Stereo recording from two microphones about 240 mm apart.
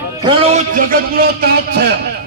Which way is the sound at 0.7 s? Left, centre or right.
Right.